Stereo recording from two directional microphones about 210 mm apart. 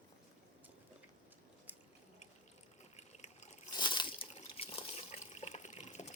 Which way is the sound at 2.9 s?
30° left (ahead or behind).